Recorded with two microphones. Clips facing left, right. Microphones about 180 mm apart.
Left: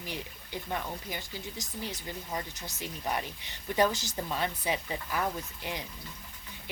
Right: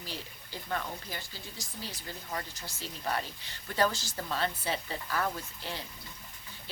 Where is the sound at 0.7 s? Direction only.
20° left (ahead or behind).